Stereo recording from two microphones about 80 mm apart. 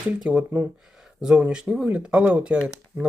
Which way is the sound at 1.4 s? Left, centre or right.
Centre.